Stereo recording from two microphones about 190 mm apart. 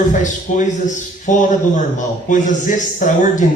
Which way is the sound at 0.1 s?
40° left (ahead or behind).